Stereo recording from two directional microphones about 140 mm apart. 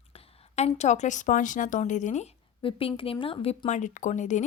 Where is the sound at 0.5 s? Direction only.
50° left (ahead or behind).